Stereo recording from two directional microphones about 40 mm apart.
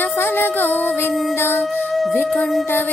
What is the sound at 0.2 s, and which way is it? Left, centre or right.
Music, left.